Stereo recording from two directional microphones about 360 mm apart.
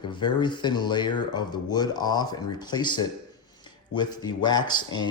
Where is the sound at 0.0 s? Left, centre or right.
Centre.